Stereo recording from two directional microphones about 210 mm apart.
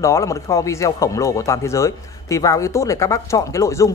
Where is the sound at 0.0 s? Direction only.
15° left (ahead or behind).